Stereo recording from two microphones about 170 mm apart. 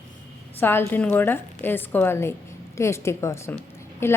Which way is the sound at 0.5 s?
10° left (ahead or behind).